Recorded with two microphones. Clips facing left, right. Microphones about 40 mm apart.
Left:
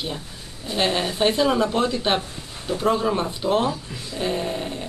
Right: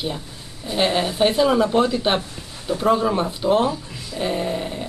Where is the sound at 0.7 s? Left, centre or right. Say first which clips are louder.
Right 2 dB; centre.